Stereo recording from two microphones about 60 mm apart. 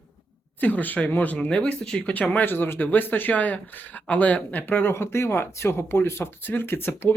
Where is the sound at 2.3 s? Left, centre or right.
Left.